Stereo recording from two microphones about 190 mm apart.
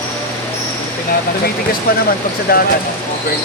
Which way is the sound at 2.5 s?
50° left (ahead or behind).